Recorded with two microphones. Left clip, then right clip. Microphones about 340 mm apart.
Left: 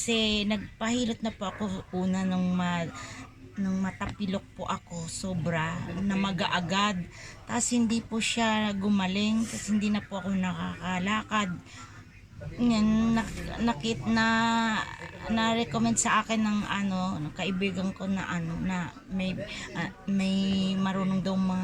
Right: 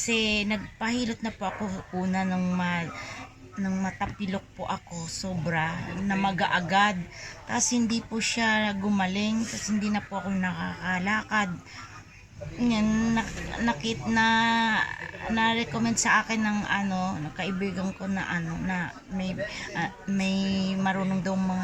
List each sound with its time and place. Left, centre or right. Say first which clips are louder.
0.0 s speech: right 1 dB; centre
12.6 s speech: even; centre